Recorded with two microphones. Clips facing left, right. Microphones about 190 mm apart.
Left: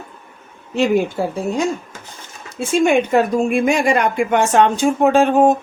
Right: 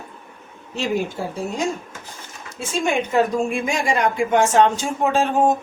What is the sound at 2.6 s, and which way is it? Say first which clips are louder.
Speech: left 7 dB; 60° left (ahead or behind).